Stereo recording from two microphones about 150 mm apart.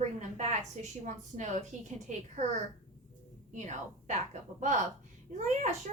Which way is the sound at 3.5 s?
55° right (ahead or behind).